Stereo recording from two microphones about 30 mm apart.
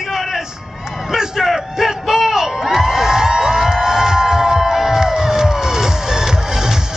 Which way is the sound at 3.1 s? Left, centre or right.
Centre.